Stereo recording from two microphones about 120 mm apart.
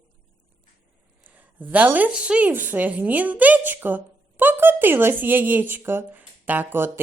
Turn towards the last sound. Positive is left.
turn(degrees=-15)  # may be behind; listen again after turning